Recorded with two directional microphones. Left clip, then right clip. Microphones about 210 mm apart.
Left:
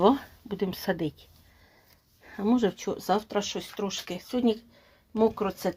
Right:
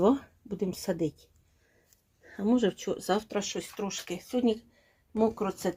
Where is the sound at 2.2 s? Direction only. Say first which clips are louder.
Left 2 dB; 15° left (ahead or behind).